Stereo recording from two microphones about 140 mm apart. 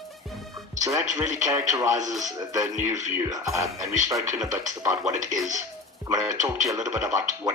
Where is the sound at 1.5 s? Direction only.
20° right (ahead or behind).